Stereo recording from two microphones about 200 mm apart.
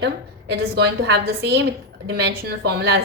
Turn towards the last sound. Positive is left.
turn(degrees=-55)  # may be behind; listen again after turning